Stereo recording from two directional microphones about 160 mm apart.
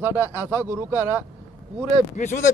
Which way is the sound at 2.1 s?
50° left (ahead or behind).